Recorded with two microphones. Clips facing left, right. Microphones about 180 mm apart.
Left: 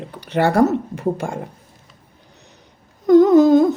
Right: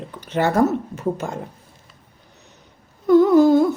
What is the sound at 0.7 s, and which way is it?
Humming, 10° left (ahead or behind).